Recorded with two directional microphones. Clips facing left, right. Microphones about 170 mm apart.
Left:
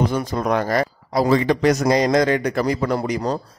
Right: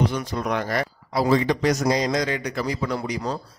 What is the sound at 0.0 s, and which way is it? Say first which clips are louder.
Speech: left 4 dB; 45° left (ahead or behind).